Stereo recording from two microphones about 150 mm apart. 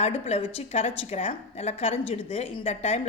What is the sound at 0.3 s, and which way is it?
A woman's voice, 45° left (ahead or behind).